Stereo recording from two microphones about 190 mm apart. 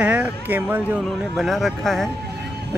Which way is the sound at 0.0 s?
5° right (ahead or behind).